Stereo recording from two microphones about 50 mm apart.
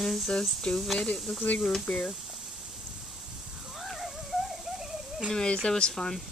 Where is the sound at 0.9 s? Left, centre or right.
Left.